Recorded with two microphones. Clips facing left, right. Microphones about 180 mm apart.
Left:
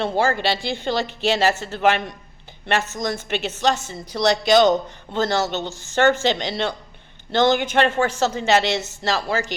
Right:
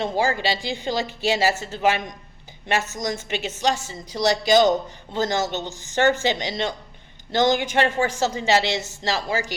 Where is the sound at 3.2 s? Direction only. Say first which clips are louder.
Left 3 dB; 60° left (ahead or behind).